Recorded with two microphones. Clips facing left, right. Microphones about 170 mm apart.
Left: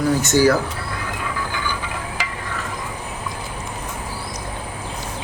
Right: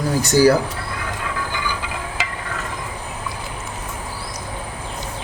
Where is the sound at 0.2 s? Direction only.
35° right (ahead or behind).